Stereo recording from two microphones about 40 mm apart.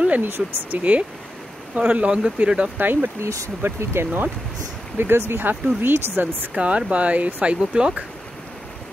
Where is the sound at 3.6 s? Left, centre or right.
Right.